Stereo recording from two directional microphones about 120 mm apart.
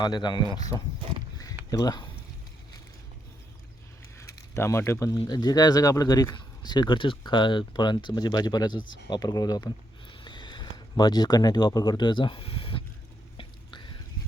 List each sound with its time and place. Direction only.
0.0 s speech: 40° left (ahead or behind)
0.7 s speech: 30° right (ahead or behind)
1.7 s speech: 30° left (ahead or behind)
4.2 s speech: 20° left (ahead or behind); by 12.8 s 50° left (ahead or behind)
13.3 s whispering: 45° left (ahead or behind)